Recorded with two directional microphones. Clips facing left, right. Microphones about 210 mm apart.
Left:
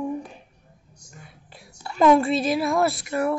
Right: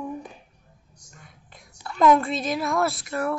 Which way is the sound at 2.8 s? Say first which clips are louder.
Left 3 dB; centre (ahead or behind).